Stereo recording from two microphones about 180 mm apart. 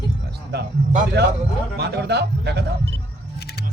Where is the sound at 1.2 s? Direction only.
65° right (ahead or behind).